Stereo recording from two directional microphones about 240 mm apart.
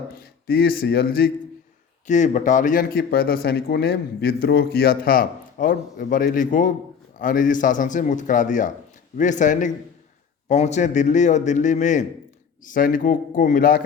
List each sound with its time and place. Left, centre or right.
0.1 s a man's voice: left